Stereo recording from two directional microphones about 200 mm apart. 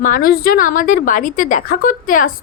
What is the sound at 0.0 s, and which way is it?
A woman's voice, 45° left (ahead or behind).